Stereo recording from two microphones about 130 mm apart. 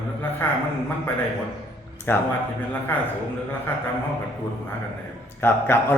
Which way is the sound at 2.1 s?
20° left (ahead or behind).